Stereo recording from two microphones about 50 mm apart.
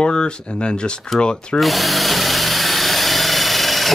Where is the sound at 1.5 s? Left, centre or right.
Centre.